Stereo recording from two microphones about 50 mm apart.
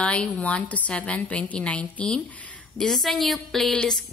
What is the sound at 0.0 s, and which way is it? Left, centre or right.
A woman's voice, left.